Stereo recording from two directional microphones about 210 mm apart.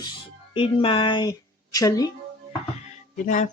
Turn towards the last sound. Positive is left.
turn(degrees=35)  # may be behind; listen again after turning